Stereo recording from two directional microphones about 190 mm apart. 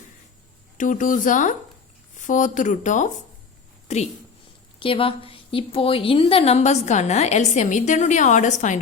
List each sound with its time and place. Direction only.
0.8 s a woman's voice: 45° left (ahead or behind)